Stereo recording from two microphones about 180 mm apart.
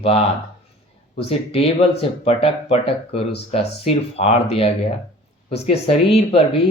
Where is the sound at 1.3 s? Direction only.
30° left (ahead or behind).